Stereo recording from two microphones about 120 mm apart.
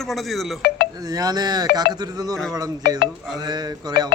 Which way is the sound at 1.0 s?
30° right (ahead or behind).